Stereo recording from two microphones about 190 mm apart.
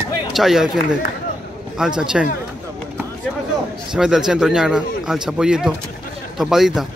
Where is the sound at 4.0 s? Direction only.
5° right (ahead or behind).